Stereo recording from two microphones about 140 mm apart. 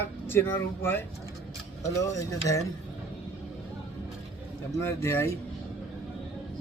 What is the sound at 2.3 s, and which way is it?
Speech, 25° left (ahead or behind).